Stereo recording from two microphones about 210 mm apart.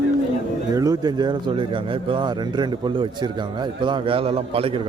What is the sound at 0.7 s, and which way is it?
Speech, 15° right (ahead or behind).